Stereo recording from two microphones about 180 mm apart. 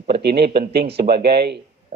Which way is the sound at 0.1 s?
65° right (ahead or behind).